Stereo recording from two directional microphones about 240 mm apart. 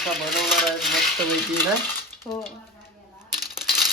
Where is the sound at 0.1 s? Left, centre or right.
Centre.